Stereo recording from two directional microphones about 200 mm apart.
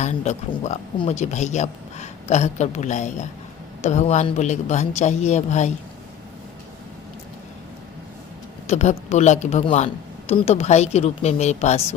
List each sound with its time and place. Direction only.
0.0 s a man's voice: 35° left (ahead or behind)
8.6 s a man's voice: 35° left (ahead or behind)